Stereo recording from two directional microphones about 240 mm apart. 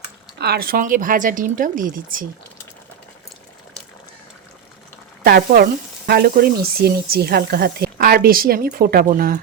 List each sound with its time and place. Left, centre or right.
0.3 s speech: right
5.2 s speech: right